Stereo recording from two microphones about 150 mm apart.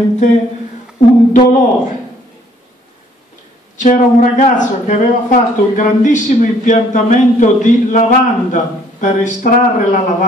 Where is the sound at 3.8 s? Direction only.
55° left (ahead or behind).